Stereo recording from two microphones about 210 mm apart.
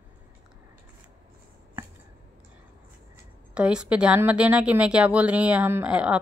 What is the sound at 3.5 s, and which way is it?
A woman's voice, 5° right (ahead or behind).